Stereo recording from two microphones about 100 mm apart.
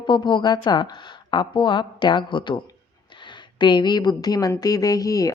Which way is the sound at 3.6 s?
50° left (ahead or behind).